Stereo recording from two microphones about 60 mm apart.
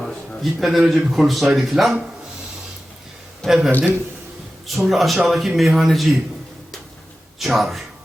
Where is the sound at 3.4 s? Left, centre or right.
Centre.